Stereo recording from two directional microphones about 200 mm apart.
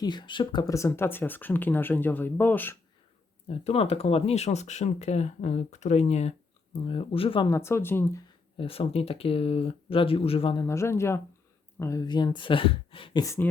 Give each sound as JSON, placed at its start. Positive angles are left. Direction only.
{"t": 0.0, "sound": "speech", "side_deg": 20}
{"t": 3.5, "sound": "speech", "side_deg": 30}
{"t": 7.5, "sound": "speech", "side_deg": 10}
{"t": 8.5, "sound": "speech", "side_deg": 30}